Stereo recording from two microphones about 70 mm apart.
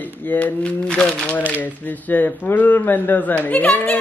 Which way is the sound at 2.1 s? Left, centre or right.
Left.